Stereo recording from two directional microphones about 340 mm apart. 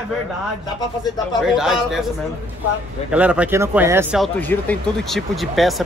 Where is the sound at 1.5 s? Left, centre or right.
Centre.